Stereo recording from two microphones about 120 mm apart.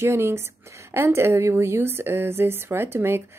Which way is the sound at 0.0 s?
20° right (ahead or behind).